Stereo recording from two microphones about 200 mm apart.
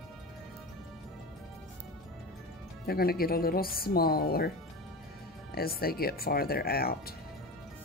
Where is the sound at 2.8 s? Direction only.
50° left (ahead or behind).